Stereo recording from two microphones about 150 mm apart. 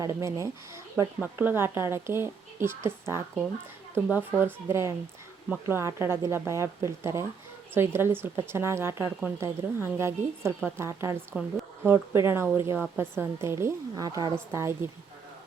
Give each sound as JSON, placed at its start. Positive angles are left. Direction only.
{"t": 0.0, "sound": "a woman's voice", "side_deg": -20}